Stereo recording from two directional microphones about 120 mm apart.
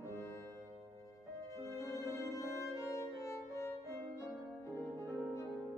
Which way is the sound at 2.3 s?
25° left (ahead or behind).